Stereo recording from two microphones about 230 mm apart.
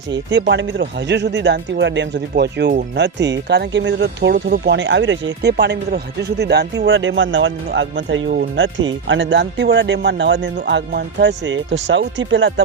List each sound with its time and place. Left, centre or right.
0.1 s speech: right